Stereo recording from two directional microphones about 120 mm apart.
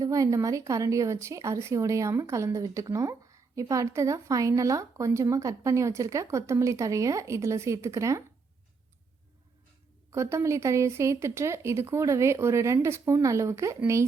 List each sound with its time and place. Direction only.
0.0 s speech: 30° right (ahead or behind)
10.1 s speech: 25° right (ahead or behind)